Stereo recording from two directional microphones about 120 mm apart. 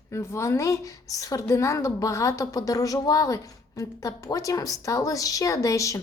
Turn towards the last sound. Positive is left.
turn(degrees=25)  # may be behind; listen again after turning